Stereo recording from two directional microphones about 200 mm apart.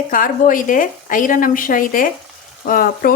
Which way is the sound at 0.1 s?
40° left (ahead or behind).